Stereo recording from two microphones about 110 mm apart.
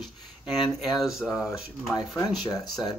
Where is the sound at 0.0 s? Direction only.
Centre (ahead or behind).